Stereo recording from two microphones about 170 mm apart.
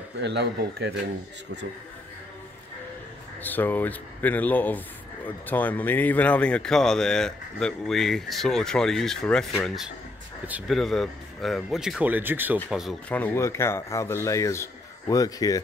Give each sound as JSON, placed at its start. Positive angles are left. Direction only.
{"t": 0.2, "sound": "speech", "side_deg": -90}
{"t": 3.4, "sound": "speech", "side_deg": 10}
{"t": 10.8, "sound": "speech", "side_deg": 0}
{"t": 13.1, "sound": "a man's voice", "side_deg": 10}